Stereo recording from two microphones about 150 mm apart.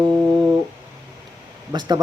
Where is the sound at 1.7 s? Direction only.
25° right (ahead or behind).